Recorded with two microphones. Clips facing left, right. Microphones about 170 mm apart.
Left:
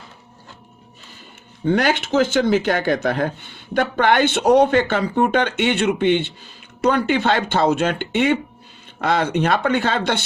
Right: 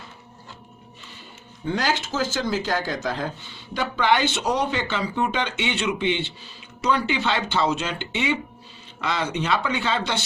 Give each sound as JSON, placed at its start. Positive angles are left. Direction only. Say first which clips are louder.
{"t": 1.6, "sound": "speech", "louder": "left 7 dB", "side_deg": 65}